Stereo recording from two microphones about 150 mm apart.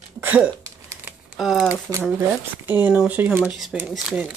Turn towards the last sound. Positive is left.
turn(degrees=-5)  # may be behind; listen again after turning